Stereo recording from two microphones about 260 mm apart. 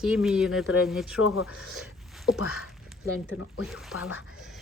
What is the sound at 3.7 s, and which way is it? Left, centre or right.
Speech, centre.